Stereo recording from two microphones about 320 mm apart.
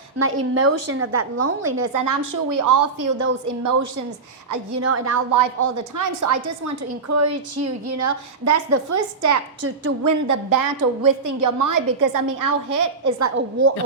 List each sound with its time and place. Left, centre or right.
0.2 s a woman's voice: right
1.8 s a woman's voice: right
4.8 s a woman's voice: right
5.3 s a woman's voice: right
7.6 s a woman's voice: right